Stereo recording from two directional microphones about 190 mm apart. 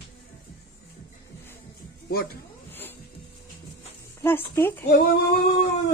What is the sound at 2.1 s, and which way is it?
Speech, 55° left (ahead or behind).